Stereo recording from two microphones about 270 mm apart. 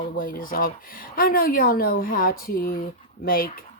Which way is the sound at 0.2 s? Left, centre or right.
Left.